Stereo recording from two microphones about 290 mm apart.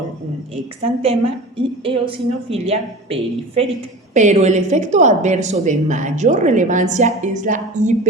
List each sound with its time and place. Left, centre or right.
1.5 s speech: centre